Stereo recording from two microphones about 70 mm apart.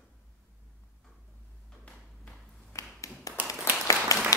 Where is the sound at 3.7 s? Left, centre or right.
Left.